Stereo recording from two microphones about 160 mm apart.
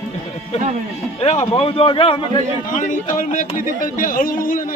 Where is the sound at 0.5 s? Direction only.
40° left (ahead or behind).